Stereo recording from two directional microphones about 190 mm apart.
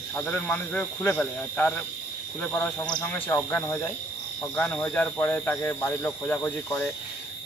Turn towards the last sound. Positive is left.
turn(degrees=10)  # may be behind; listen again after turning